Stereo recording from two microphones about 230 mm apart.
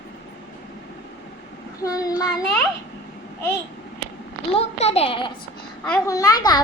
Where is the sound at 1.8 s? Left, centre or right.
Centre.